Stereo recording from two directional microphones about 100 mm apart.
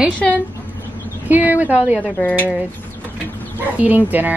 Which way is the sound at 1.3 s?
15° right (ahead or behind).